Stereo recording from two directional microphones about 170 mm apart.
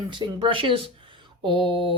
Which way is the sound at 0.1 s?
30° right (ahead or behind).